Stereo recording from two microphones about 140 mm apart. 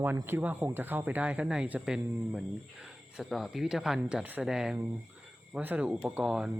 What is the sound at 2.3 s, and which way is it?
Speech, 5° right (ahead or behind).